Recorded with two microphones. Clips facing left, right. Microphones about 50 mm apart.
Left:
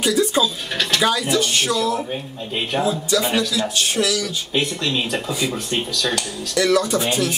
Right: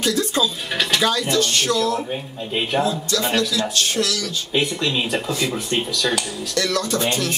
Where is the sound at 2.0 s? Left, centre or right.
Centre.